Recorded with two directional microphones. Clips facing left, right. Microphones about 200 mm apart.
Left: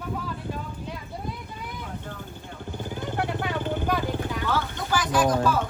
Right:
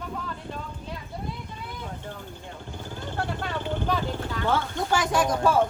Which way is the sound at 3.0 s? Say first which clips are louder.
Left 2 dB; 15° left (ahead or behind).